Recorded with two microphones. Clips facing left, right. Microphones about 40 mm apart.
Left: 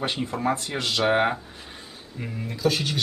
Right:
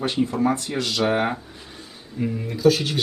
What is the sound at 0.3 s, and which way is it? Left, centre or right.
Speech, centre.